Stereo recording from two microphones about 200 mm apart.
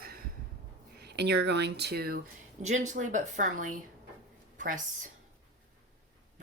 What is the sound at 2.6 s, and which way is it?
A woman's voice, 35° right (ahead or behind).